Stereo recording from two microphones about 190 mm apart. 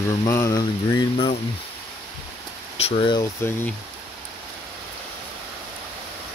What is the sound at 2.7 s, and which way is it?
Speech, 30° left (ahead or behind).